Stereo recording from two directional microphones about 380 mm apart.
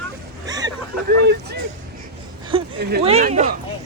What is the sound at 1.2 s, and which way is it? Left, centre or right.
Speech, right.